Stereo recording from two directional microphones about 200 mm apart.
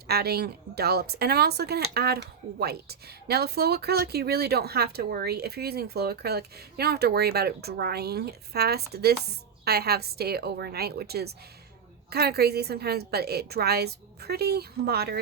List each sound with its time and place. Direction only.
0.1 s a woman's voice: 50° right (ahead or behind)